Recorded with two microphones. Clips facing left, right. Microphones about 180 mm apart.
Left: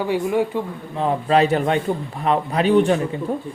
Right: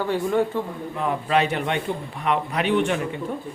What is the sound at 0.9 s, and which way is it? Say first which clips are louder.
A man's voice: left 5 dB; 30° left (ahead or behind).